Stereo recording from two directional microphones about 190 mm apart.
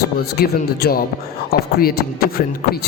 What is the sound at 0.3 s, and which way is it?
Speech, 55° left (ahead or behind).